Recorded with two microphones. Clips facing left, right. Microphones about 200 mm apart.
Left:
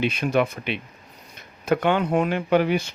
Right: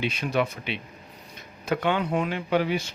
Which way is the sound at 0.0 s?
55° left (ahead or behind).